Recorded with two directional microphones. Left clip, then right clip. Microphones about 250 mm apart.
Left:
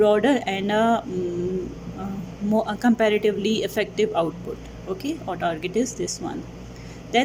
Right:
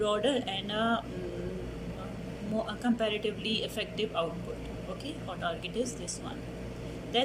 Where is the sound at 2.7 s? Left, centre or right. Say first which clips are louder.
Left 11 dB; left.